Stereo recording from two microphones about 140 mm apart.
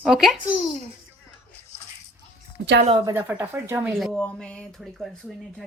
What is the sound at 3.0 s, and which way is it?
Speech, 15° right (ahead or behind).